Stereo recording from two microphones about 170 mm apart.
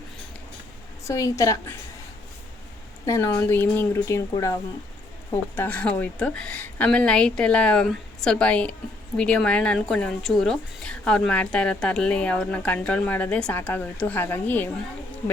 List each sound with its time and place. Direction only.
1.0 s a woman's voice: 20° left (ahead or behind)
3.1 s a woman's voice: 15° left (ahead or behind)